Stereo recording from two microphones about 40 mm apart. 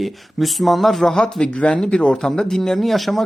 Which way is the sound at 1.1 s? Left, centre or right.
Centre.